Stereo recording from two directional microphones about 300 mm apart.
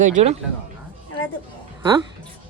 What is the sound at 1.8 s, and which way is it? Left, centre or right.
Speech, centre.